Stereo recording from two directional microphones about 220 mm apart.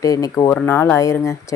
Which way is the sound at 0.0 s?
15° left (ahead or behind).